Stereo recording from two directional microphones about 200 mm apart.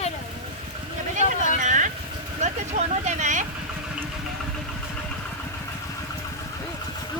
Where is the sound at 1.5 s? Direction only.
40° right (ahead or behind).